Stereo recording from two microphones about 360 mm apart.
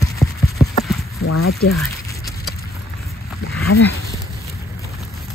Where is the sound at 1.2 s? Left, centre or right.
Left.